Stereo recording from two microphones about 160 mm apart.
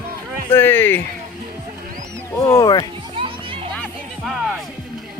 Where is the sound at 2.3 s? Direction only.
20° left (ahead or behind).